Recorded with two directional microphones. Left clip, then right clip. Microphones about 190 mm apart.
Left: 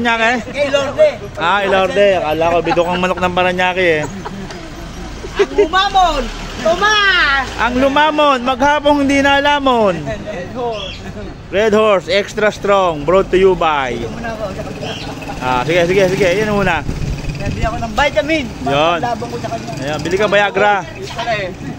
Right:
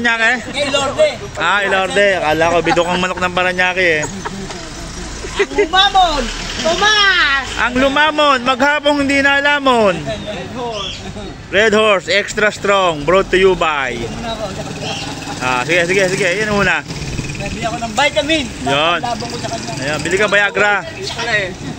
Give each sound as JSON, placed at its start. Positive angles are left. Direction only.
{"t": 0.0, "sound": "a man's voice", "side_deg": 0}
{"t": 2.8, "sound": "a man's voice", "side_deg": 0}
{"t": 5.7, "sound": "a child's voice", "side_deg": -25}
{"t": 7.5, "sound": "a man's voice", "side_deg": 0}
{"t": 11.5, "sound": "a man's voice", "side_deg": 0}
{"t": 15.4, "sound": "a man's voice", "side_deg": 5}